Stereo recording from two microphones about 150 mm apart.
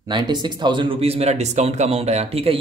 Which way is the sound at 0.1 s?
30° right (ahead or behind).